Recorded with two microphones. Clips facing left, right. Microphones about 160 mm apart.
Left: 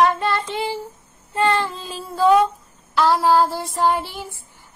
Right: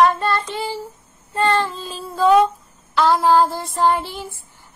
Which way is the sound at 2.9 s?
5° left (ahead or behind).